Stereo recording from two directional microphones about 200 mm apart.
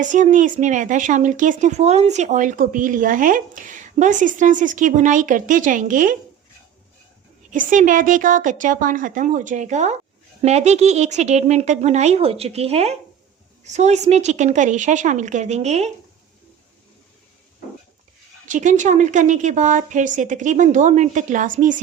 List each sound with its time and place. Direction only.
0.0 s speech: 40° right (ahead or behind)
7.5 s speech: 40° right (ahead or behind)
18.4 s speech: 40° right (ahead or behind)